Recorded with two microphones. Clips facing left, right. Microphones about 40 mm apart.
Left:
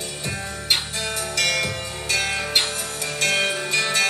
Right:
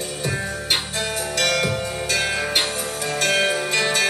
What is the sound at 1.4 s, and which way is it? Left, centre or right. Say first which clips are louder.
Music: right 3 dB; centre.